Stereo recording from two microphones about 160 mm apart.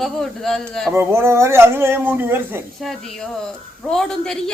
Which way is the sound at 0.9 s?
15° right (ahead or behind).